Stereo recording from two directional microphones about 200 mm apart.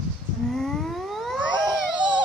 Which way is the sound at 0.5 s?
Centre (ahead or behind).